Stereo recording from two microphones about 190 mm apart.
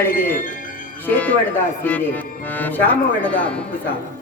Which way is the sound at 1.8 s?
10° left (ahead or behind).